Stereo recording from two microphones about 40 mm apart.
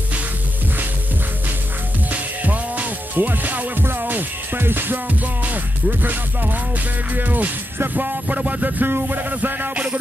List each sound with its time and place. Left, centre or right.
2.0 s music: right